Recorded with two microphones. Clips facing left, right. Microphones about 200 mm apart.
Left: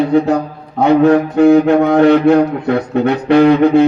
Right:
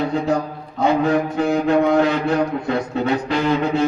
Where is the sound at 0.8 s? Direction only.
65° left (ahead or behind).